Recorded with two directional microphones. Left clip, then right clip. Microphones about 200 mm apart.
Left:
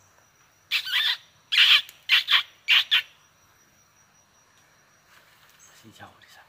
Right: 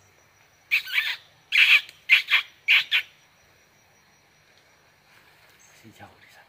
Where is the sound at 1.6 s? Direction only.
5° left (ahead or behind).